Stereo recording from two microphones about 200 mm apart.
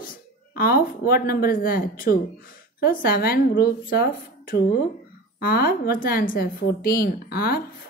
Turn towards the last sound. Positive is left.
turn(degrees=50)  # may be behind; listen again after turning